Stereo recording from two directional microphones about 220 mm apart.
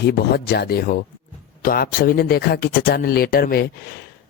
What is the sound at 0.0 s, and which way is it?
A man's voice, 45° left (ahead or behind).